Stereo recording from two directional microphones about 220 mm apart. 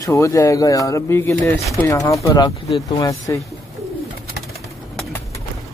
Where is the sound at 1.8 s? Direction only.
15° left (ahead or behind).